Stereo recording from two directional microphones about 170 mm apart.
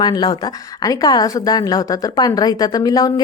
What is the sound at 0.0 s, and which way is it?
A woman's voice, 25° left (ahead or behind).